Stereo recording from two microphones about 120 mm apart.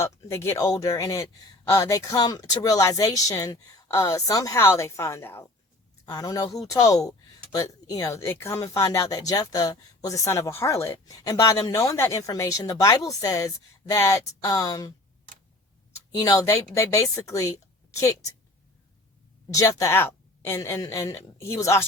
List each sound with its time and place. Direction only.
0.0 s speech: 20° left (ahead or behind)
16.1 s speech: 30° left (ahead or behind)
19.5 s speech: 25° left (ahead or behind)